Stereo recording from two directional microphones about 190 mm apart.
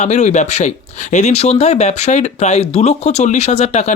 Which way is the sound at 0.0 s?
35° left (ahead or behind).